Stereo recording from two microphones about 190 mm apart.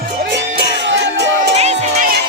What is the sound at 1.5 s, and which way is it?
Music, 35° right (ahead or behind).